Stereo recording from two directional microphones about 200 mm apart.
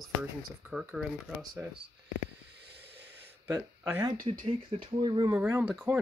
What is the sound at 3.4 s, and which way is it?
Speech, 10° right (ahead or behind).